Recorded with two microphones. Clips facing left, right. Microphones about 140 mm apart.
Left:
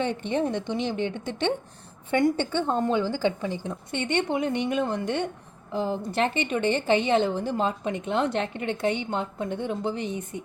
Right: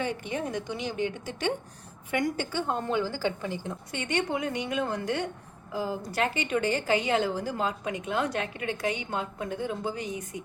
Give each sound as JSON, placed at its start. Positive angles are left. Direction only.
{"t": 0.3, "sound": "a woman's voice", "side_deg": 25}